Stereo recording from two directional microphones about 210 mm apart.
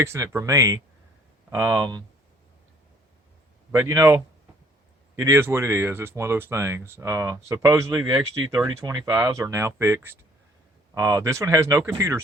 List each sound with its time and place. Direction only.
0.0 s speech: 15° right (ahead or behind)
3.7 s speech: 15° right (ahead or behind)
5.2 s speech: 10° right (ahead or behind)